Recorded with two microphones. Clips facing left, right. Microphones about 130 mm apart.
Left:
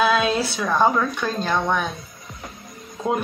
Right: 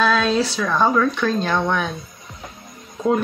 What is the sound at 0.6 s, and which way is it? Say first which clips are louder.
Speech: left 1 dB; 15° left (ahead or behind).